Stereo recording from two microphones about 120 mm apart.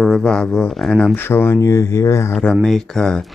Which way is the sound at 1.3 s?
20° left (ahead or behind).